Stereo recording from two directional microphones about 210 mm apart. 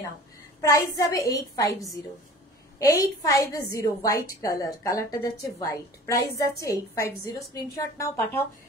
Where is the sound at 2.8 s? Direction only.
15° left (ahead or behind).